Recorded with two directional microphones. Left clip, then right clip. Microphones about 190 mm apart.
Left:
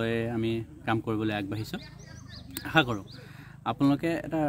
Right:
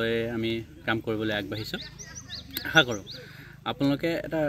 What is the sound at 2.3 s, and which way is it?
Bird, 30° left (ahead or behind).